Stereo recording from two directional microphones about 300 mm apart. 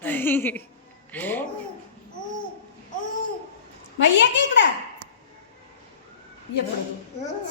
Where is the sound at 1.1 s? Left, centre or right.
Centre.